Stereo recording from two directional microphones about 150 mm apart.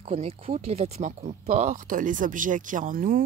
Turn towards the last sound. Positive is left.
turn(degrees=-65)  # may be behind; listen again after turning